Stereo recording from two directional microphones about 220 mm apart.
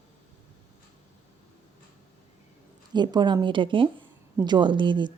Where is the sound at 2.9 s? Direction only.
20° right (ahead or behind).